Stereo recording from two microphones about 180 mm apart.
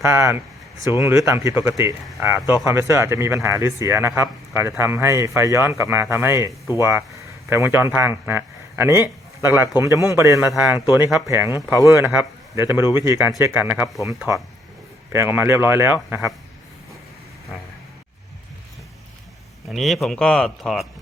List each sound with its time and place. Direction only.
0.0 s a man's voice: 15° right (ahead or behind)
15.1 s a man's voice: 10° right (ahead or behind)
19.7 s speech: centre (ahead or behind)